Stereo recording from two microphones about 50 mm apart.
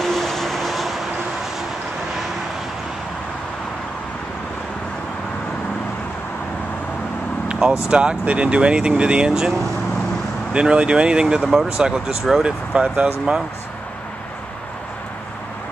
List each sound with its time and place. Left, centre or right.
0.0 s vehicle: centre
7.9 s speech: centre
10.5 s speech: right